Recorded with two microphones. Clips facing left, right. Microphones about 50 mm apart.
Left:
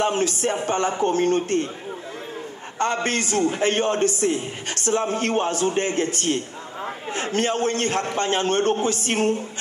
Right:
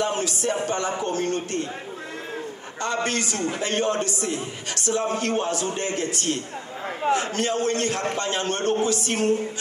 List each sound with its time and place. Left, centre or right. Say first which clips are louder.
0.0 s speech: left 3 dB; left
2.8 s speech: left 3 dB; left